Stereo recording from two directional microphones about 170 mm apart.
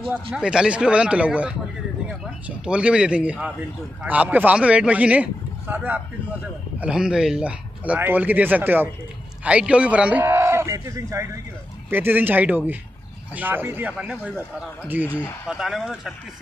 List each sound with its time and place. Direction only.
0.1 s a man's voice: 10° right (ahead or behind)